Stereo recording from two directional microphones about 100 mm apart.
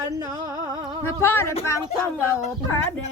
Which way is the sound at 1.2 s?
25° left (ahead or behind).